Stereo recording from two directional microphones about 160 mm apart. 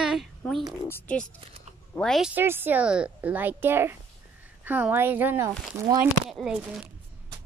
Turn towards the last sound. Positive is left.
turn(degrees=-5)  # may be behind; listen again after turning